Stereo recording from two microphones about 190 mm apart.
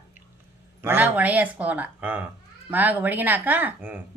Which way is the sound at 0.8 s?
10° right (ahead or behind).